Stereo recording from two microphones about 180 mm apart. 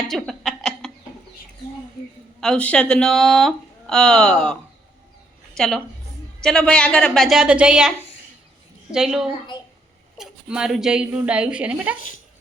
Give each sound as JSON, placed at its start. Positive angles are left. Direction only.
{"t": 0.1, "sound": "a sound", "side_deg": 0}
{"t": 2.4, "sound": "speech", "side_deg": 5}
{"t": 5.5, "sound": "speech", "side_deg": 0}
{"t": 11.9, "sound": "a woman's voice", "side_deg": 50}